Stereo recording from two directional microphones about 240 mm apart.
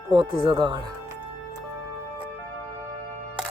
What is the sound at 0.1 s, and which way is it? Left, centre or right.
Speech, right.